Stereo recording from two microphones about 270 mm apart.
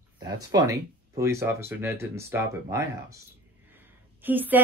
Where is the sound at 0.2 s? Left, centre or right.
Centre.